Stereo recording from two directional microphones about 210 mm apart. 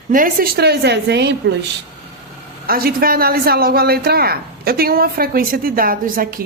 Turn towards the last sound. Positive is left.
turn(degrees=-40)  # may be behind; listen again after turning